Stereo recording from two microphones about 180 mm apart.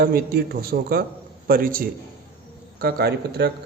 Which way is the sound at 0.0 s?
55° right (ahead or behind).